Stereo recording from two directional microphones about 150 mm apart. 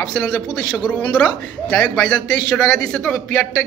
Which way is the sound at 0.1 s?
5° left (ahead or behind).